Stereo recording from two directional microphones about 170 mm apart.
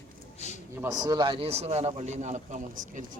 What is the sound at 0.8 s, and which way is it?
A man's voice, 25° right (ahead or behind).